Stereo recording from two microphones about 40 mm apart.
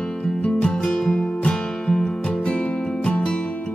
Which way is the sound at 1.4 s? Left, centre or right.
Left.